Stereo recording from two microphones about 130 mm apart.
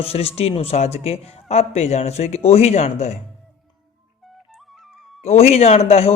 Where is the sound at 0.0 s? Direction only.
50° left (ahead or behind).